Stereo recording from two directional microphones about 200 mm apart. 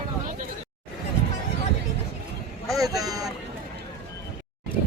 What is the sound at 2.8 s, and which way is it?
Vehicle, 20° right (ahead or behind).